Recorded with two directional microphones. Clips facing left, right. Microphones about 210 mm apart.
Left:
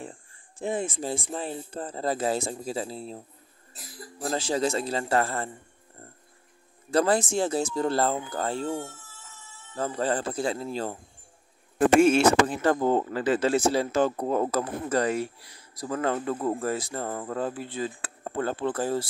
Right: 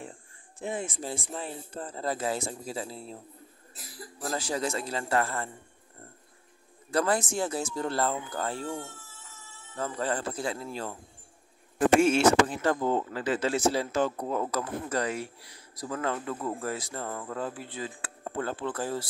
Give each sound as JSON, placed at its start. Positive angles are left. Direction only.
{"t": 0.6, "sound": "speech", "side_deg": 30}
{"t": 4.2, "sound": "speech", "side_deg": 25}
{"t": 6.9, "sound": "speech", "side_deg": 30}
{"t": 12.3, "sound": "speech", "side_deg": 35}